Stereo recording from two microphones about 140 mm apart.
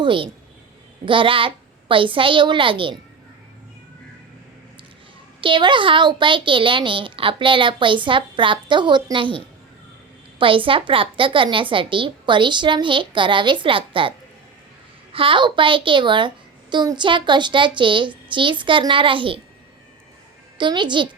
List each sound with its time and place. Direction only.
0.0 s a woman's voice: 35° right (ahead or behind)
5.4 s a woman's voice: 35° right (ahead or behind)
15.1 s a woman's voice: 40° right (ahead or behind)
20.6 s a woman's voice: 35° right (ahead or behind)